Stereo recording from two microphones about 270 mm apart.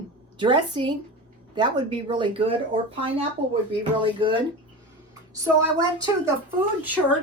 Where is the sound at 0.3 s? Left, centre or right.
Centre.